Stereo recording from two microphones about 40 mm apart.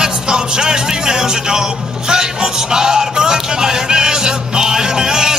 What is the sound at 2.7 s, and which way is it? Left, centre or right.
Music, centre.